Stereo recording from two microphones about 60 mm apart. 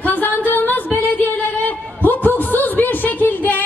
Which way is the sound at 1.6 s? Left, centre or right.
Left.